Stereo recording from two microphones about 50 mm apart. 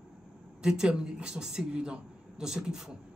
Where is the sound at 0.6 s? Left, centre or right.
Centre.